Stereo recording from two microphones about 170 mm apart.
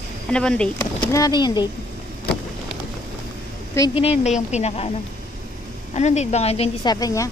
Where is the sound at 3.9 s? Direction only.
35° left (ahead or behind).